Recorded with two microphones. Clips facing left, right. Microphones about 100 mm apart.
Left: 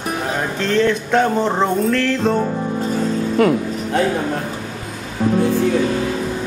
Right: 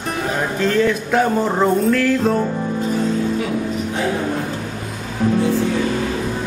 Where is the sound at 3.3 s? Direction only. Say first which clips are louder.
Left 5 dB; 60° left (ahead or behind).